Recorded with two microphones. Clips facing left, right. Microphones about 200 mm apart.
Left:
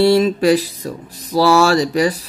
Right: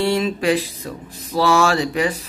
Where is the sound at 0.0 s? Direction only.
40° left (ahead or behind).